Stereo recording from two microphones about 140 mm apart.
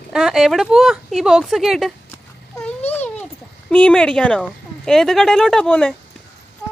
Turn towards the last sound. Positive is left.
turn(degrees=5)  # may be behind; listen again after turning